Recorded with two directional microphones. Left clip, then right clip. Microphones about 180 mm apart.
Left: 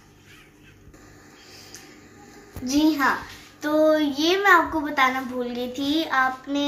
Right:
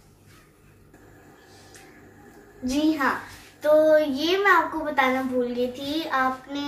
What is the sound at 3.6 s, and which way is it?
A child's voice, 50° left (ahead or behind).